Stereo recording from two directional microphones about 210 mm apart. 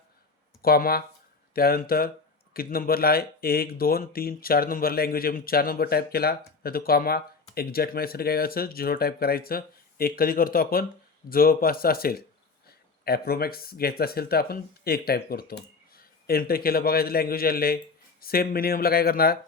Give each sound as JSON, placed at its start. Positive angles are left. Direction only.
{"t": 0.6, "sound": "speech", "side_deg": 45}